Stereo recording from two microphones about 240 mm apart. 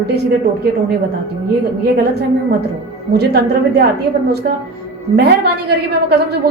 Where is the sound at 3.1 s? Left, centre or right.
Right.